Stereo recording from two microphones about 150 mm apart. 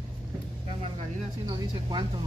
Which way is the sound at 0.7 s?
35° right (ahead or behind).